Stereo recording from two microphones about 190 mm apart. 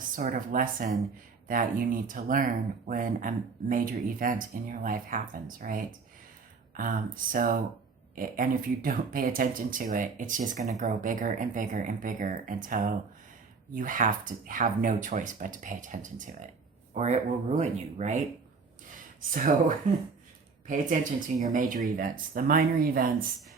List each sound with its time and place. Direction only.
0.2 s speech: 45° right (ahead or behind)
19.2 s speech: 45° right (ahead or behind)